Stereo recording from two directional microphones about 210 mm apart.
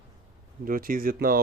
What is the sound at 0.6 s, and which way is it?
Speech, 40° right (ahead or behind).